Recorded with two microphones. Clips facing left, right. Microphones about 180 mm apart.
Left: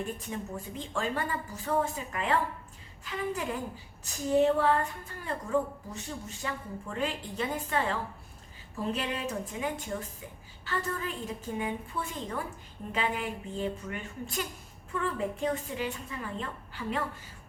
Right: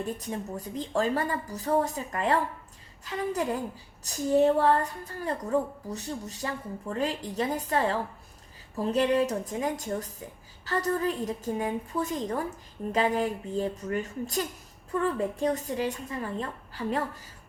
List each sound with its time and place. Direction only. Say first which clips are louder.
0.2 s a woman's voice: right 3 dB; 40° right (ahead or behind)
9.0 s a woman's voice: right 9 dB; 40° right (ahead or behind)